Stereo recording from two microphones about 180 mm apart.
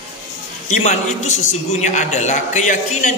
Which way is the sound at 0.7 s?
40° left (ahead or behind).